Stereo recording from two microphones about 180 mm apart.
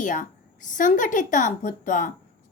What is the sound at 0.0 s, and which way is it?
A woman's voice, 45° left (ahead or behind).